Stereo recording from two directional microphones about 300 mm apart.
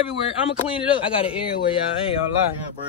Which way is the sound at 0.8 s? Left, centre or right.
Centre.